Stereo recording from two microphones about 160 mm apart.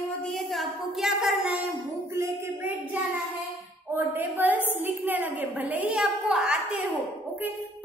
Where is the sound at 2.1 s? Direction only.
15° right (ahead or behind).